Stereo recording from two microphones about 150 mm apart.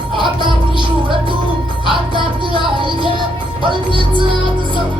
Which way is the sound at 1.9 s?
35° right (ahead or behind).